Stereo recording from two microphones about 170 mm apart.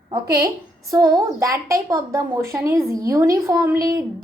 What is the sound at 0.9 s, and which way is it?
A woman's voice, 20° right (ahead or behind).